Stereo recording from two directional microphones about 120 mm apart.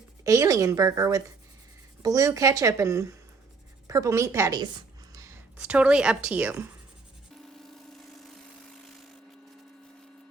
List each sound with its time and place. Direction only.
0.3 s a woman's voice: 30° right (ahead or behind)
5.1 s a sound: 25° right (ahead or behind)
5.5 s a woman's voice: 10° right (ahead or behind)